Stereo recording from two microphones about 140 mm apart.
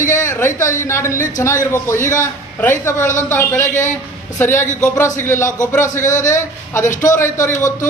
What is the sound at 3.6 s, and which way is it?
Speech, 60° left (ahead or behind).